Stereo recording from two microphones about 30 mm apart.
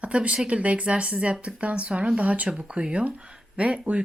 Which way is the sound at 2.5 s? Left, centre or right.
Right.